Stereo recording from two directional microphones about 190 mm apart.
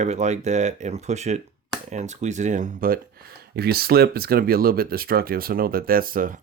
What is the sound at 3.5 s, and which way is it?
Speech, 55° right (ahead or behind).